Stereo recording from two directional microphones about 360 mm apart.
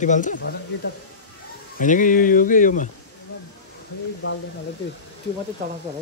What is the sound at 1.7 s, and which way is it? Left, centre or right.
Speech, left.